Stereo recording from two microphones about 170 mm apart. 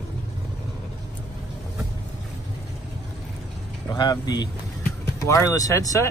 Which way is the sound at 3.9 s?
25° left (ahead or behind).